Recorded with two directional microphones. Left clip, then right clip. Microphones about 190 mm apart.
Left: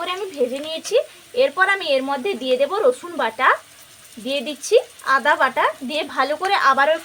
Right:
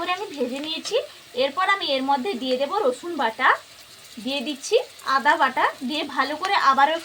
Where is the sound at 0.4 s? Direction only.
35° left (ahead or behind).